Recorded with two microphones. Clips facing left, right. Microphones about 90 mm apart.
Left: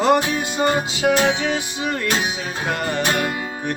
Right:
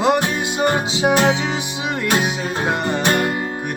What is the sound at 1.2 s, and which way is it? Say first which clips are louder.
Music: right 1 dB; 30° right (ahead or behind).